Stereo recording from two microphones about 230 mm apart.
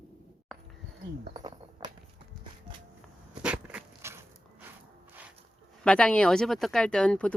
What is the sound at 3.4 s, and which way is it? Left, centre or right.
Dog, centre.